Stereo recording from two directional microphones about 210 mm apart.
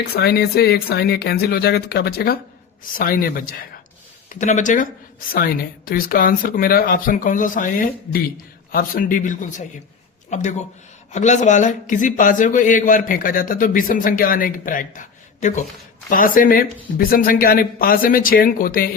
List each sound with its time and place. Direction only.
0.2 s speech: 50° left (ahead or behind)